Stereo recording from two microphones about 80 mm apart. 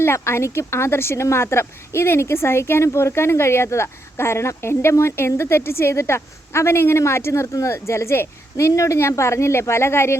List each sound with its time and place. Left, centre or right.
0.0 s a woman's voice: left